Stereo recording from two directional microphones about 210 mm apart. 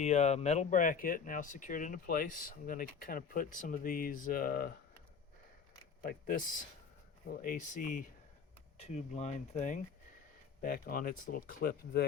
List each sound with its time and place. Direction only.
0.0 s speech: 35° left (ahead or behind)
6.0 s speech: 40° left (ahead or behind)